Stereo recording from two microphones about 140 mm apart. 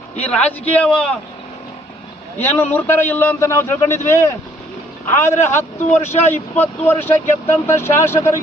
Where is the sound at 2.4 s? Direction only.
15° left (ahead or behind).